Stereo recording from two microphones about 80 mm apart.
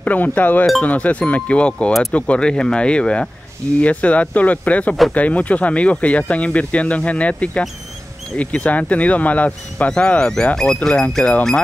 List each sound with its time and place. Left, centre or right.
0.0 s speech: centre